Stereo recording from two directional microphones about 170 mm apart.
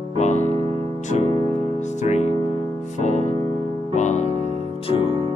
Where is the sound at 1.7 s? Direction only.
45° left (ahead or behind).